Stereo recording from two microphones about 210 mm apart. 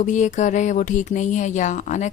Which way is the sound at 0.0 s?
35° left (ahead or behind).